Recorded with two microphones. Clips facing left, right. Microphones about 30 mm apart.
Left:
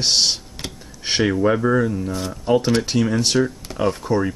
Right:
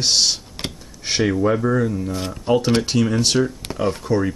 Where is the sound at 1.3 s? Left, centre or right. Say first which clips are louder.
Left 1 dB; centre.